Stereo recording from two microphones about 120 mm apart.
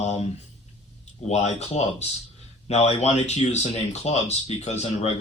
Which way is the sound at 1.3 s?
65° left (ahead or behind).